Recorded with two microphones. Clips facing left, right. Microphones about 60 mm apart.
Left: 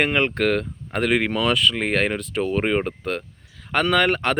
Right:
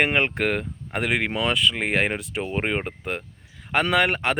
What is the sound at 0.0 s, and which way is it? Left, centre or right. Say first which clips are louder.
Speech: left 2 dB; centre.